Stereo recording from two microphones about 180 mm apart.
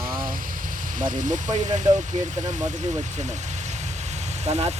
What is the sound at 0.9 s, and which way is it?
Speech, 45° right (ahead or behind).